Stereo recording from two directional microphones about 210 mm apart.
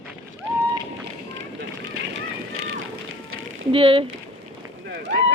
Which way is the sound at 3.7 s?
25° right (ahead or behind).